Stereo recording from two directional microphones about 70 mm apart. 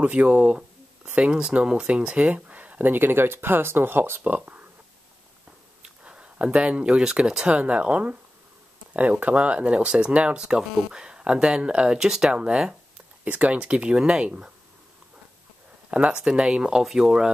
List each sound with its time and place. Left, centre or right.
0.0 s speech: right
5.8 s speech: centre
15.9 s speech: centre